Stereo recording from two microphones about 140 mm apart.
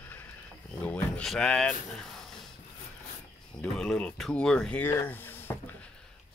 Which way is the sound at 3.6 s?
5° left (ahead or behind).